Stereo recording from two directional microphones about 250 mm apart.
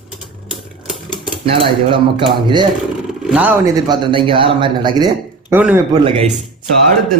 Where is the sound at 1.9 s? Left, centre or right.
Right.